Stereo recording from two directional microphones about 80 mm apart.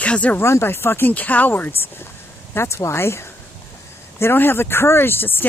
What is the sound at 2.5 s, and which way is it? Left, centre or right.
Speech, left.